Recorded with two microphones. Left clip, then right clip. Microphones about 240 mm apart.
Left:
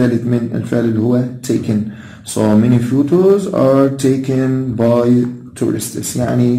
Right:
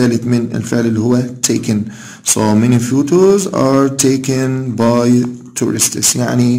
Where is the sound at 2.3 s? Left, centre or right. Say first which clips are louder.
Even; right.